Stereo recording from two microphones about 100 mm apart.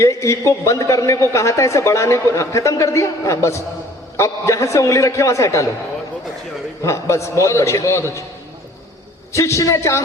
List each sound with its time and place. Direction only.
0.0 s a man's voice: 30° left (ahead or behind)
6.8 s a man's voice: 30° left (ahead or behind)
9.3 s a man's voice: 30° left (ahead or behind)